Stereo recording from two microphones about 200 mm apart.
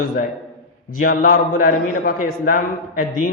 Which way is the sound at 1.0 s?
45° left (ahead or behind).